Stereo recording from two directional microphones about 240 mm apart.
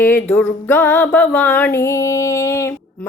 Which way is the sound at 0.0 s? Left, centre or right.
Centre.